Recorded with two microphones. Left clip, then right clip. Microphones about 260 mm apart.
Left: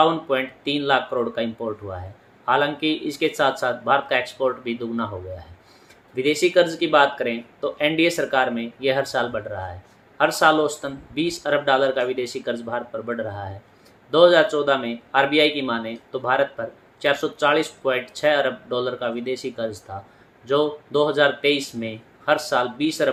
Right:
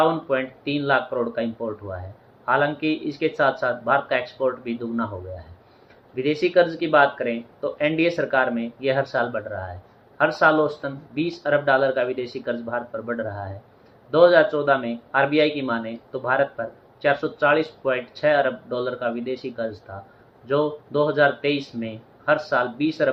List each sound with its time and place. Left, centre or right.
0.0 s speech: left
6.1 s speech: left